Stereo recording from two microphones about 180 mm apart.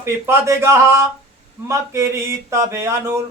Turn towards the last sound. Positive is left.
turn(degrees=-15)  # may be behind; listen again after turning